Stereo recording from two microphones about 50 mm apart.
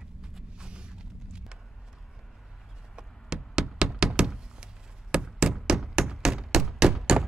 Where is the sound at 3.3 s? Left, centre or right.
Centre.